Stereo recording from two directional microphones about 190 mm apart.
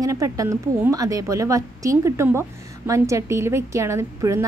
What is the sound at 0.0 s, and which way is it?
A woman's voice, 15° right (ahead or behind).